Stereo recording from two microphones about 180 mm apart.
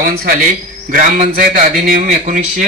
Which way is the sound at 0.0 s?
50° right (ahead or behind).